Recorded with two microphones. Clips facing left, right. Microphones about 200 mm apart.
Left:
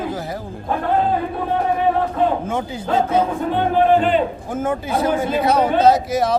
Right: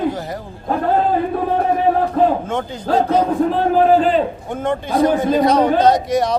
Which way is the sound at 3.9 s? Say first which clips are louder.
Right 2 dB; 35° right (ahead or behind).